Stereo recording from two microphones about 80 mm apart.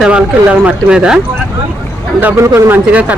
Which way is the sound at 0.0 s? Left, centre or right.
Centre.